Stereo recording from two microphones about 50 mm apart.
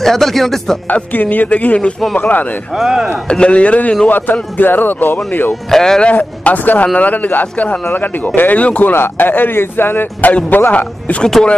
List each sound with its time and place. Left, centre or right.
0.0 s speech: centre
0.8 s speech: left
2.7 s speech: centre
3.3 s speech: left
4.1 s speech: left
5.5 s speech: centre
6.1 s speech: left
8.9 s speech: left
10.7 s speech: left